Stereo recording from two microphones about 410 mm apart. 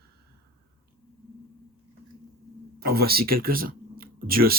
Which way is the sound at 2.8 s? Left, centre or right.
Right.